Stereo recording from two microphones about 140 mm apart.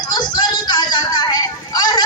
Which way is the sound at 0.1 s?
30° left (ahead or behind).